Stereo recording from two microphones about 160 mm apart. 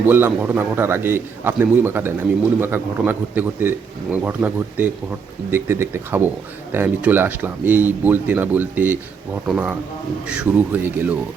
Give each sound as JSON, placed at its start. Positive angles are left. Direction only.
{"t": 0.0, "sound": "speech", "side_deg": -10}
{"t": 10.2, "sound": "speech", "side_deg": -10}